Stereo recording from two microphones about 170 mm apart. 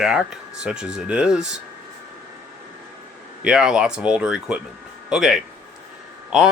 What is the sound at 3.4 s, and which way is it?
Speech, 5° right (ahead or behind).